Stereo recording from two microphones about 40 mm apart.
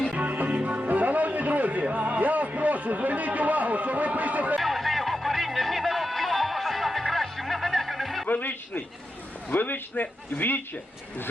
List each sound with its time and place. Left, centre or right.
0.2 s music: right
4.6 s music: centre
8.3 s a sound: left
9.5 s a man's voice: left